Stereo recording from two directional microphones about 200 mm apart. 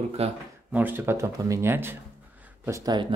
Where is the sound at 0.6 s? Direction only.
10° right (ahead or behind).